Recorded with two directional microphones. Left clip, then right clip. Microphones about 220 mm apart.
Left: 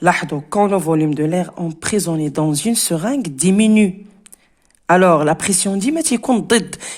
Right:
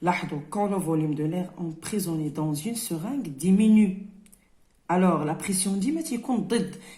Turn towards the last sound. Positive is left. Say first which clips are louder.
# left 11 dB
turn(degrees=50)  # may be behind; listen again after turning